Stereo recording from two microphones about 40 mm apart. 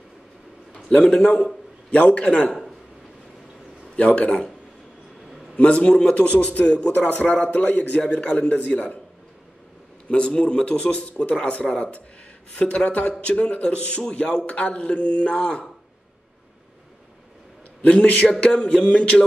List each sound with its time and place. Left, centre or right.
0.9 s a man's voice: left
3.9 s a man's voice: left
5.6 s a man's voice: left
6.1 s a man's voice: left
6.9 s a man's voice: left
10.0 s a man's voice: left
17.8 s a man's voice: left
18.4 s a man's voice: left